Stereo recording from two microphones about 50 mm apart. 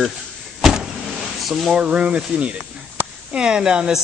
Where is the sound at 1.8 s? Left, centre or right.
Right.